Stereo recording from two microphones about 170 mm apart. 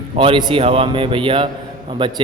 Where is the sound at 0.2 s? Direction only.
30° right (ahead or behind).